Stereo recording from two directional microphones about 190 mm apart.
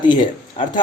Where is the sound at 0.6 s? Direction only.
25° left (ahead or behind).